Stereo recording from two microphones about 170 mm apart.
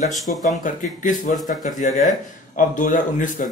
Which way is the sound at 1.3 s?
50° left (ahead or behind).